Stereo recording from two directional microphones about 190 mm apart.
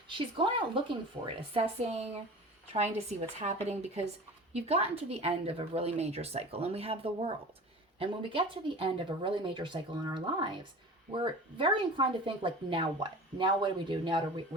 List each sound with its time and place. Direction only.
0.1 s a woman's voice: 25° right (ahead or behind)